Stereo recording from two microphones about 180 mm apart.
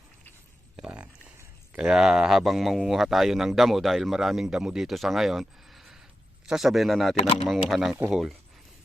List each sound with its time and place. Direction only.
0.8 s a man's voice: 5° right (ahead or behind)
7.2 s speech: 35° left (ahead or behind)
7.4 s a man's voice: centre (ahead or behind)